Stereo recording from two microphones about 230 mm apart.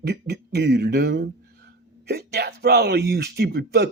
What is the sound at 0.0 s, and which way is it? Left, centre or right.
Speech, right.